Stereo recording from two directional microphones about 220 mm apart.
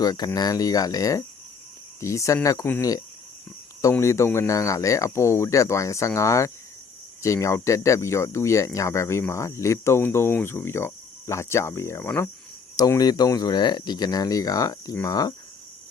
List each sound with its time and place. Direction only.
0.0 s speech: 20° left (ahead or behind)